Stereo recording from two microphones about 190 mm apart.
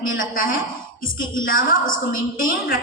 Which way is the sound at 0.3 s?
45° left (ahead or behind).